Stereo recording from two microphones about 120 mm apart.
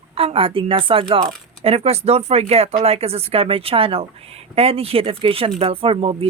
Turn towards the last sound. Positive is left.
turn(degrees=-50)  # may be behind; listen again after turning